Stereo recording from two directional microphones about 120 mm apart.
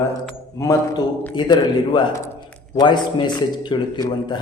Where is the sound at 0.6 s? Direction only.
25° left (ahead or behind).